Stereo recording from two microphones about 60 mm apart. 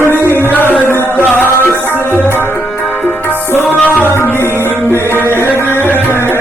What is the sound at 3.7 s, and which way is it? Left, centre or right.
Music, left.